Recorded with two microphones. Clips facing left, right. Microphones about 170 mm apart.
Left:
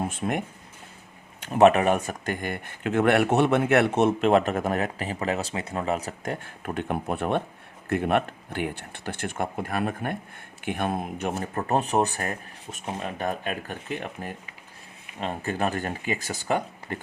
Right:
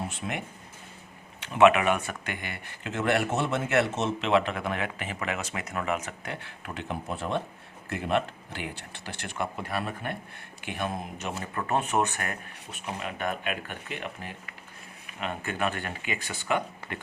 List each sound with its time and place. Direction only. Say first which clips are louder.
0.1 s a man's voice: left 6 dB; 50° left (ahead or behind)
11.6 s speech: left 3 dB; 35° left (ahead or behind)